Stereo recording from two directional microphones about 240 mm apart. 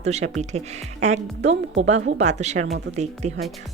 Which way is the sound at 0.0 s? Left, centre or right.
Right.